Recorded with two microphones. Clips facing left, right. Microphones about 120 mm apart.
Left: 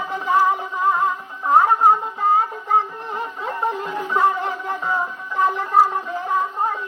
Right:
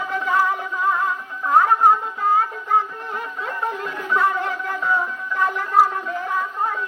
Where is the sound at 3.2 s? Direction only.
30° left (ahead or behind).